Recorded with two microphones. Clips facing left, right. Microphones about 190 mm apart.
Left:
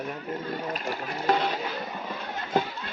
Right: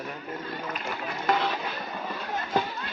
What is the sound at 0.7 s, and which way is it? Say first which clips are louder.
Run: left 2 dB; 40° left (ahead or behind).